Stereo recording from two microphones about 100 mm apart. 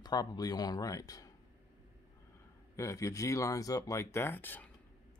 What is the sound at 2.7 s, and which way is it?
Speech, 30° left (ahead or behind).